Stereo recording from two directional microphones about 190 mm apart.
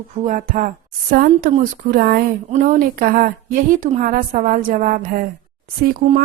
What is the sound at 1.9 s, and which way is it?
A woman's voice, 50° right (ahead or behind).